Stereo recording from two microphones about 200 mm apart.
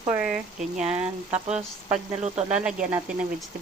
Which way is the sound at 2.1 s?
30° right (ahead or behind).